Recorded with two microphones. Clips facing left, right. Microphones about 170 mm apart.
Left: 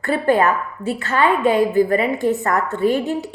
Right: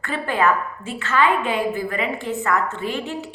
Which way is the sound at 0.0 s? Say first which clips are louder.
Left 5 dB; 40° left (ahead or behind).